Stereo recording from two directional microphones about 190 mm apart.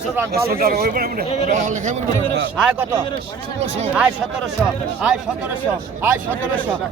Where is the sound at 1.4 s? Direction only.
40° right (ahead or behind).